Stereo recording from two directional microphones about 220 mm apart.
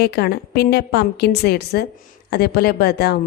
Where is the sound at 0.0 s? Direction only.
45° left (ahead or behind).